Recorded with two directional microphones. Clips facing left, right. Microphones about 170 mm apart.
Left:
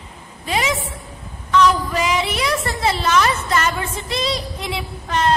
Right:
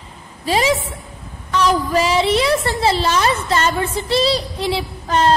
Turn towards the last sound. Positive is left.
turn(degrees=-30)  # may be behind; listen again after turning